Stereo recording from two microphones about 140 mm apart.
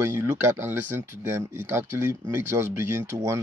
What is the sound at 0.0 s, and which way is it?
Speech, 15° right (ahead or behind).